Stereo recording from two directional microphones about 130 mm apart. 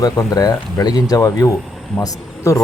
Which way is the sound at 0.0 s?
30° left (ahead or behind).